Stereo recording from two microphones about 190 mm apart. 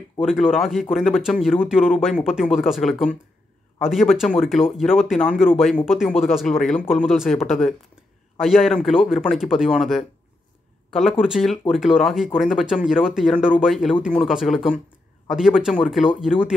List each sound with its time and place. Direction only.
0.2 s speech: centre (ahead or behind)